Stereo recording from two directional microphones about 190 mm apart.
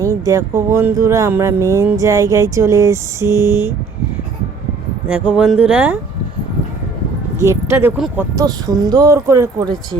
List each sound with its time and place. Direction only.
0.0 s speech: 15° right (ahead or behind)
5.0 s speech: 5° right (ahead or behind)
7.4 s speech: 15° right (ahead or behind)
8.4 s speech: 20° right (ahead or behind)